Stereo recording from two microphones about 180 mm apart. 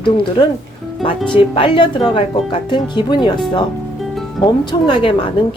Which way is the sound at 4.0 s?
Centre (ahead or behind).